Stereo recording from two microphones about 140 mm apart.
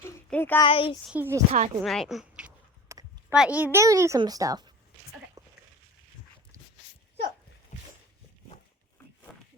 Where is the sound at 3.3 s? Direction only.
5° right (ahead or behind); by 4.6 s 25° right (ahead or behind).